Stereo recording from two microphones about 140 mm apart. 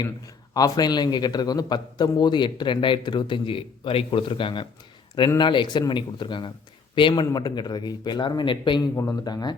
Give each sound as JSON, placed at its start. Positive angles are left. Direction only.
{"t": 0.5, "sound": "a man's voice", "side_deg": 30}